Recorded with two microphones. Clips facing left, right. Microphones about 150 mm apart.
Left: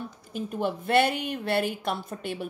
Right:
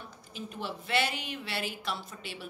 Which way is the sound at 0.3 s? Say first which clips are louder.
Left 9 dB; 50° left (ahead or behind).